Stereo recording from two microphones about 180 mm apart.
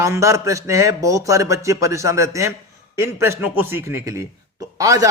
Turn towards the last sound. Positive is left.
turn(degrees=-20)  # may be behind; listen again after turning